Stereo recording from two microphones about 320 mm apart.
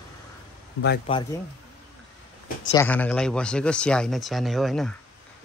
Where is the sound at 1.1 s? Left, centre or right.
Centre.